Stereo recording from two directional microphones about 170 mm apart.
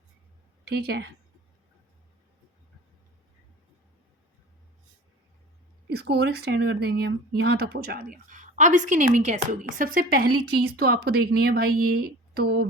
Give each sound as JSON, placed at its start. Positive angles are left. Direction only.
{"t": 0.7, "sound": "a woman's voice", "side_deg": -65}
{"t": 5.9, "sound": "speech", "side_deg": -70}